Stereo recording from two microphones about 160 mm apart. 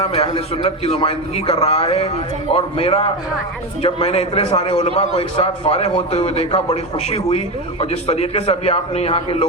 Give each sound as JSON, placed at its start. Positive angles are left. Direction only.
{"t": 0.0, "sound": "a man's voice", "side_deg": 40}